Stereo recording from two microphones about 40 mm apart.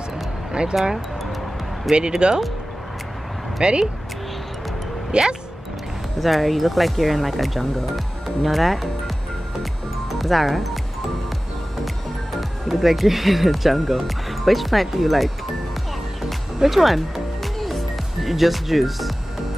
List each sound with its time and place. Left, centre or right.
0.5 s speech: right
2.0 s speech: right
3.6 s speech: right
5.1 s speech: right
6.1 s speech: centre
10.1 s speech: centre
12.4 s speech: centre
16.5 s speech: centre
17.6 s music: centre